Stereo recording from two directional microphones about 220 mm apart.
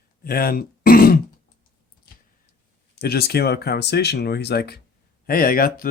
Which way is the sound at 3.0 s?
45° left (ahead or behind).